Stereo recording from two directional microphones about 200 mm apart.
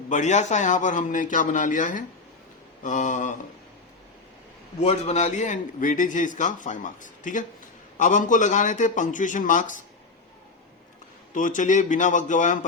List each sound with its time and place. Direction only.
0.1 s a man's voice: 35° left (ahead or behind)
4.8 s a man's voice: 35° left (ahead or behind)
11.3 s a man's voice: 40° left (ahead or behind)